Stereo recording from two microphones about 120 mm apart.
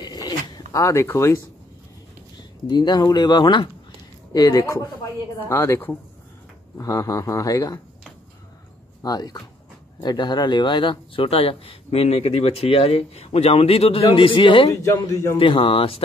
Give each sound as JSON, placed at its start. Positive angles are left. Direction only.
{"t": 0.0, "sound": "a sound", "side_deg": 35}
{"t": 2.7, "sound": "a man's voice", "side_deg": 40}
{"t": 9.0, "sound": "speech", "side_deg": 30}
{"t": 14.7, "sound": "a man's voice", "side_deg": 30}
{"t": 15.3, "sound": "speech", "side_deg": 45}